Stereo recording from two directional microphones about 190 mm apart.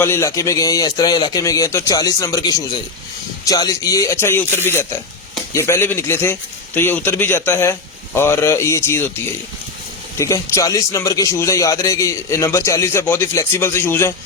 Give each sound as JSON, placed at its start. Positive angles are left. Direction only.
{"t": 0.0, "sound": "a man's voice", "side_deg": 15}
{"t": 10.2, "sound": "a man's voice", "side_deg": 15}